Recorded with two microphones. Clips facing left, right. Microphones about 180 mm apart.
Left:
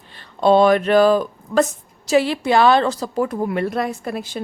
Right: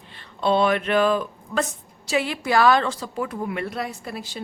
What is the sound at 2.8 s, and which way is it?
Speech, 40° left (ahead or behind).